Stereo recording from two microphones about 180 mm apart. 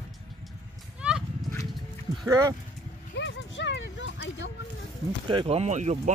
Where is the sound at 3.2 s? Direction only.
90° left.